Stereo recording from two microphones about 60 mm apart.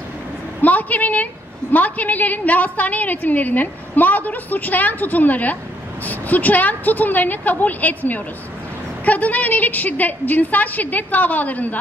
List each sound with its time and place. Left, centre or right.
0.6 s a woman's voice: left